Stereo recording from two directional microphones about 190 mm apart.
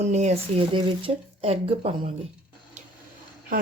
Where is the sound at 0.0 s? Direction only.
35° right (ahead or behind).